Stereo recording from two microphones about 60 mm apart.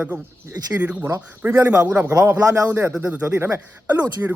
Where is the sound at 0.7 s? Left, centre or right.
Right.